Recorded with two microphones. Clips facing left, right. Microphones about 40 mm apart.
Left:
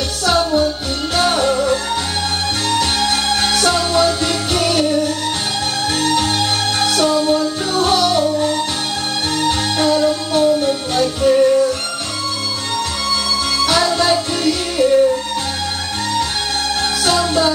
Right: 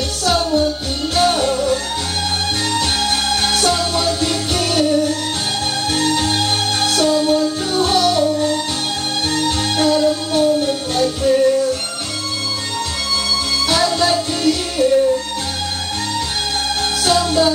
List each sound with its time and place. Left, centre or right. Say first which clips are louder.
0.2 s music: left 1 dB; centre
13.7 s music: left 1 dB; centre
17.0 s music: right 1 dB; centre